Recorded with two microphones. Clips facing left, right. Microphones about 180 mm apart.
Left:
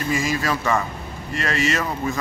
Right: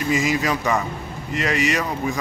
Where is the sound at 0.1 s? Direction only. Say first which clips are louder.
Right 2 dB; 20° right (ahead or behind).